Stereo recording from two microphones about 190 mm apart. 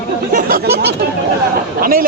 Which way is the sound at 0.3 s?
50° right (ahead or behind).